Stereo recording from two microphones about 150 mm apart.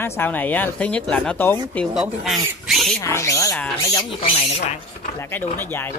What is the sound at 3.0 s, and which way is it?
Speech, 20° left (ahead or behind).